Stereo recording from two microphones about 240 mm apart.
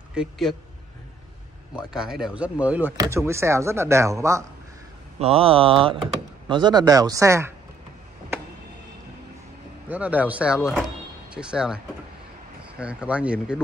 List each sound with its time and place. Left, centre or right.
0.1 s speech: centre
1.8 s speech: centre
5.2 s speech: right
9.8 s speech: centre